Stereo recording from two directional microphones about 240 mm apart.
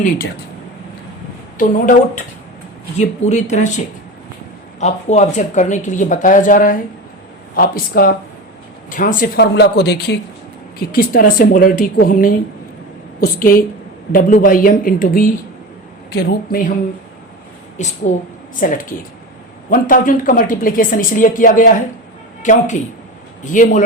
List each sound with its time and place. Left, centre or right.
1.5 s speech: left
4.8 s a woman's voice: left
17.8 s speech: left